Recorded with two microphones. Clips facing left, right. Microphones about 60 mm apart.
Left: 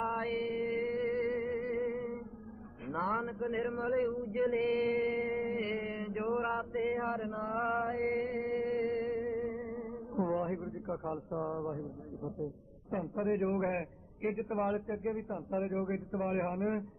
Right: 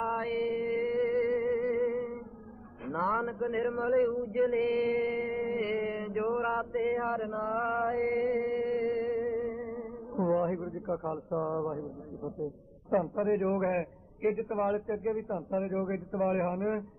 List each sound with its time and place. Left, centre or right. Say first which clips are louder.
0.0 s music: right 3 dB; centre
2.9 s a sound: right 4 dB; centre
5.5 s mantra: right 4 dB; centre
7.9 s chant: right 5 dB; centre
8.4 s music: right 3 dB; centre
13.1 s mantra: right 4 dB; centre
15.8 s mantra: right 4 dB; centre